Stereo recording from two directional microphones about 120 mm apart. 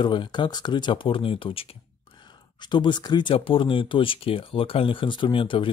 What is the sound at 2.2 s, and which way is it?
Speech, 40° left (ahead or behind).